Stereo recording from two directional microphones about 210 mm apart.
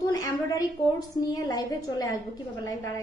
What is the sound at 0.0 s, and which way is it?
A woman's voice, 15° left (ahead or behind).